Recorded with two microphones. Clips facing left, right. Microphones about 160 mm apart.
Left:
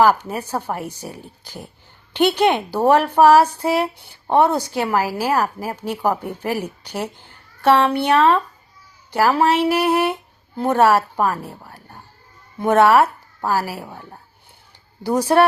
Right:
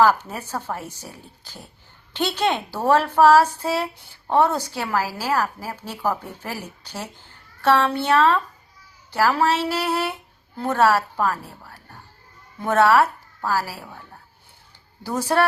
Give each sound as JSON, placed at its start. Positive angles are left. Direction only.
{"t": 0.0, "sound": "a woman's voice", "side_deg": 15}
{"t": 13.8, "sound": "a woman's voice", "side_deg": 30}
{"t": 15.0, "sound": "a woman's voice", "side_deg": 20}